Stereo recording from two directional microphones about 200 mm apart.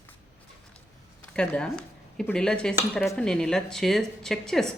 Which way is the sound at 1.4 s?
5° left (ahead or behind).